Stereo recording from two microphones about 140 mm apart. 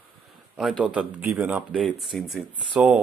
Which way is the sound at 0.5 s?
5° right (ahead or behind).